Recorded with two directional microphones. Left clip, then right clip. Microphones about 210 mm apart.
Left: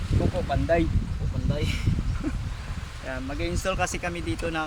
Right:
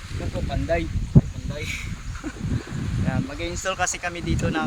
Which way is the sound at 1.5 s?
15° left (ahead or behind).